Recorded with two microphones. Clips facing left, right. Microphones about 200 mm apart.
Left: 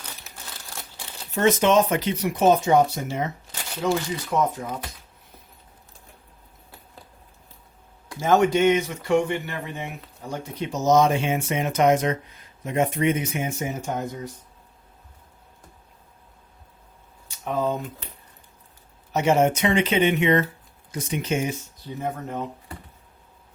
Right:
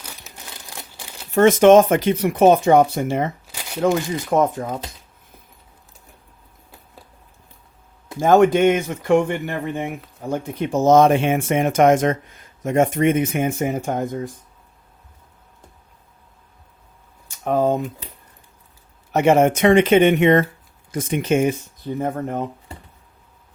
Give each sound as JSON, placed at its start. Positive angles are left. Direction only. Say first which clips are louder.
{"t": 0.5, "sound": "crumpling", "louder": "right 2 dB", "side_deg": -15}
{"t": 1.4, "sound": "speech", "louder": "right 8 dB", "side_deg": -50}
{"t": 3.4, "sound": "shuffling cards", "louder": "right 1 dB", "side_deg": -10}
{"t": 4.3, "sound": "speech", "louder": "right 6 dB", "side_deg": -50}
{"t": 8.2, "sound": "speech", "louder": "right 5 dB", "side_deg": -50}
{"t": 17.2, "sound": "a sound", "louder": "right 6 dB", "side_deg": -50}
{"t": 19.1, "sound": "speech", "louder": "right 5 dB", "side_deg": -55}